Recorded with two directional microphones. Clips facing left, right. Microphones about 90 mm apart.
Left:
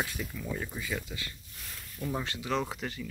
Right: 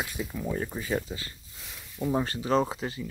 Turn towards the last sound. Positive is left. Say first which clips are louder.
# right 6 dB
turn(degrees=-25)  # may be behind; listen again after turning